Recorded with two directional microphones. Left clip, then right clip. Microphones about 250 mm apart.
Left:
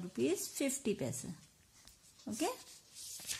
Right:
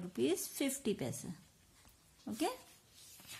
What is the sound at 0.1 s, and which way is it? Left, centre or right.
Speech, centre.